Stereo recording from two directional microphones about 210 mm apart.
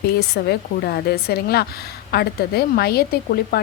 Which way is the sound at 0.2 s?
50° left (ahead or behind).